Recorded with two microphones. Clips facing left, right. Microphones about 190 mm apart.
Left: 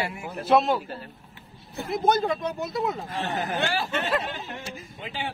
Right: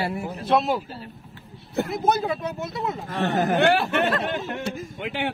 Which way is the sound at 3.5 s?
60° right (ahead or behind).